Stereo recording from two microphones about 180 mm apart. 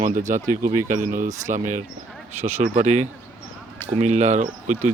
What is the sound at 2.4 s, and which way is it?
Speech, 40° right (ahead or behind).